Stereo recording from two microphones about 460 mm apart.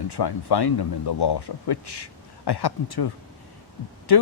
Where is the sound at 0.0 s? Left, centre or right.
Left.